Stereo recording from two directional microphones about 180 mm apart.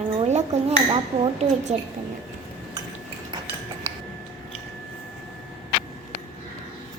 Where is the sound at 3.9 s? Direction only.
15° right (ahead or behind).